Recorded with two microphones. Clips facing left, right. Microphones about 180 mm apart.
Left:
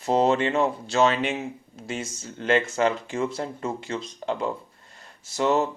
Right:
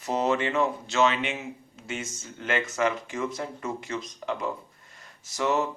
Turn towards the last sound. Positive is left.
turn(degrees=30)  # may be behind; listen again after turning